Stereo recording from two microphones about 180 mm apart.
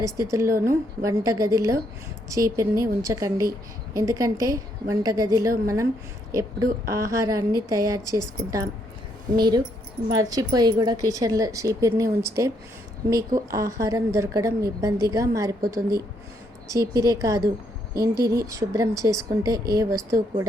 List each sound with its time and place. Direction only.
0.0 s a woman's voice: 15° right (ahead or behind)